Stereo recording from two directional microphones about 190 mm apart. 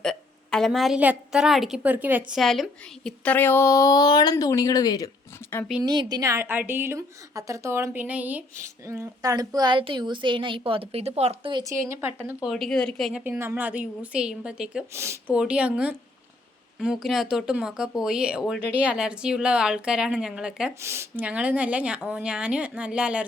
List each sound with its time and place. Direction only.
0.0 s a woman's voice: 5° left (ahead or behind)
5.8 s a woman's voice: 20° right (ahead or behind)
11.6 s a woman's voice: 15° right (ahead or behind)
12.5 s a woman's voice: centre (ahead or behind)